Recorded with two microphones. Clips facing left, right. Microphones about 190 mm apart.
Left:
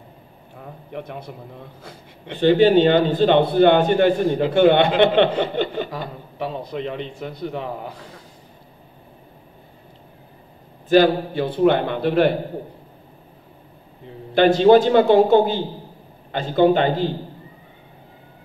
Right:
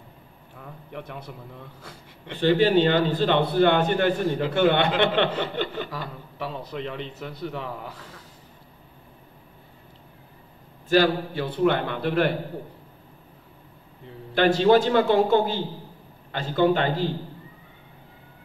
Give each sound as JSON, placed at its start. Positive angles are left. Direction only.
{"t": 0.6, "sound": "a sound", "side_deg": 20}
{"t": 1.1, "sound": "a man's voice", "side_deg": 20}
{"t": 10.9, "sound": "a man's voice", "side_deg": 25}
{"t": 14.3, "sound": "a man's voice", "side_deg": 25}